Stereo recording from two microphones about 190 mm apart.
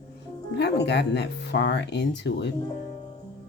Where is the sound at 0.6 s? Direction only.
60° left (ahead or behind).